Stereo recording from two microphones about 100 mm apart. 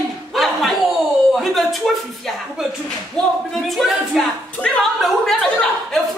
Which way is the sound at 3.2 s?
5° left (ahead or behind).